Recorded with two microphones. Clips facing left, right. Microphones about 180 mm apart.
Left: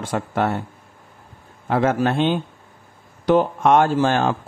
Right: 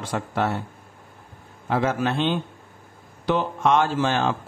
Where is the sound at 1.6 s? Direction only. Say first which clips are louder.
Left 4 dB; 50° left (ahead or behind).